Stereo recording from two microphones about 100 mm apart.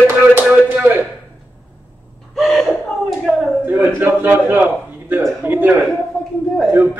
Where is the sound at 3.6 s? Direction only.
20° right (ahead or behind).